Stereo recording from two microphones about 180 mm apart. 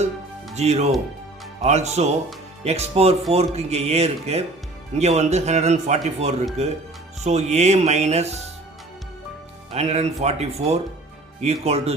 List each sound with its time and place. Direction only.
0.5 s speech: 35° right (ahead or behind)
9.7 s speech: 35° right (ahead or behind)